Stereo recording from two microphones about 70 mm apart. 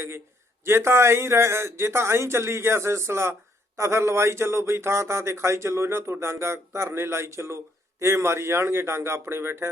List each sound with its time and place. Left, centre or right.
0.6 s speech: right